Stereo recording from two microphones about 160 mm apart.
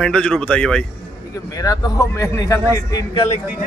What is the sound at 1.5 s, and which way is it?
Speech, 20° left (ahead or behind).